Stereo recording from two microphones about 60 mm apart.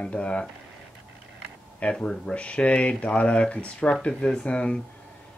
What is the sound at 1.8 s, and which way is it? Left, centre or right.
Speech, centre.